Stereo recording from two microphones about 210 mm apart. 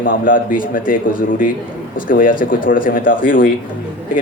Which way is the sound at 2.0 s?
40° left (ahead or behind).